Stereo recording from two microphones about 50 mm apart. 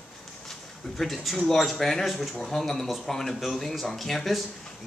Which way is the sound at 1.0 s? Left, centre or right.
Centre.